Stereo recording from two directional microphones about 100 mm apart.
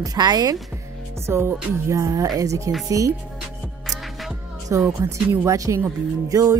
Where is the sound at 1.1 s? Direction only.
25° right (ahead or behind).